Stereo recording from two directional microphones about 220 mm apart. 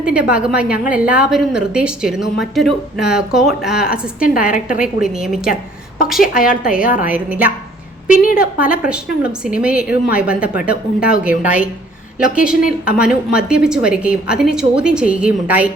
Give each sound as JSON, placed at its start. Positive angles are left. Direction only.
{"t": 0.0, "sound": "a woman's voice", "side_deg": -5}
{"t": 4.5, "sound": "a woman's voice", "side_deg": 35}
{"t": 4.9, "sound": "a woman's voice", "side_deg": 0}
{"t": 6.3, "sound": "a woman's voice", "side_deg": 40}
{"t": 7.0, "sound": "a woman's voice", "side_deg": -5}
{"t": 8.1, "sound": "a woman's voice", "side_deg": 40}
{"t": 8.4, "sound": "a woman's voice", "side_deg": -5}